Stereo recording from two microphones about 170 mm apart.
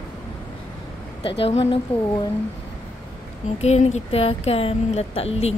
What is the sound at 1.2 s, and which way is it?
Speech, 35° left (ahead or behind).